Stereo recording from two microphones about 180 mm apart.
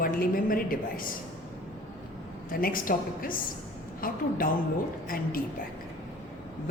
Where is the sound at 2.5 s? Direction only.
50° left (ahead or behind).